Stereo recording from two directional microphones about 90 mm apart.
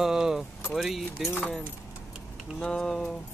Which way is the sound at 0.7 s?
Centre (ahead or behind).